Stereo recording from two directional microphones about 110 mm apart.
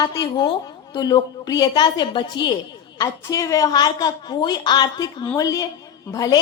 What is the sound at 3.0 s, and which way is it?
A woman's voice, 30° left (ahead or behind).